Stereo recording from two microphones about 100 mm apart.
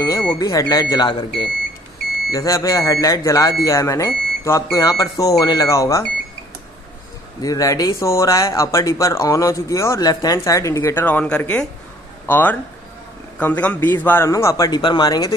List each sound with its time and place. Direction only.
0.3 s speech: 35° left (ahead or behind); by 1.5 s 55° left (ahead or behind)
2.3 s speech: 30° left (ahead or behind)
7.4 s speech: 35° left (ahead or behind)
11.1 s speech: 15° left (ahead or behind); by 15.3 s 40° left (ahead or behind)